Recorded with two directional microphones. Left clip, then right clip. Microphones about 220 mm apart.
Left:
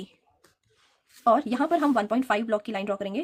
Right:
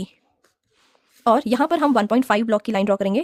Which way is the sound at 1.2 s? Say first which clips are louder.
Right 5 dB; 50° right (ahead or behind).